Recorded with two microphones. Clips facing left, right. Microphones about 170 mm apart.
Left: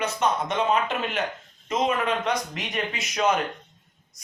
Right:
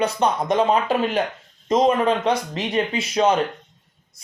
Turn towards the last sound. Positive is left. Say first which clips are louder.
# right 5 dB
turn(degrees=-30)  # may be behind; listen again after turning